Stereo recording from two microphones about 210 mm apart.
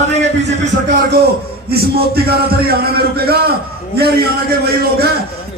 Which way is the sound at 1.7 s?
45° right (ahead or behind).